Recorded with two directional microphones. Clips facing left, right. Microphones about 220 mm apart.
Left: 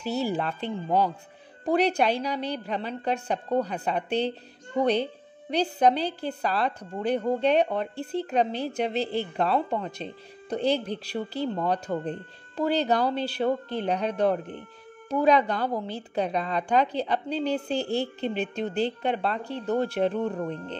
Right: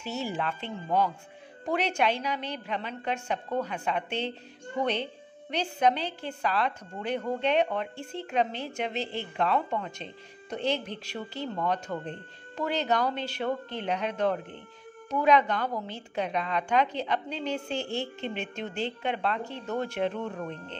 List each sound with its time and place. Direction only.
0.0 s a woman's voice: 35° left (ahead or behind)